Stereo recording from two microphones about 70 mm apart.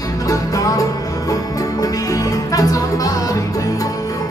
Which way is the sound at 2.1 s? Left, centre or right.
Left.